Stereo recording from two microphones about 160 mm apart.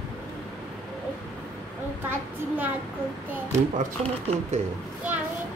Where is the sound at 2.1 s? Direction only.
10° right (ahead or behind).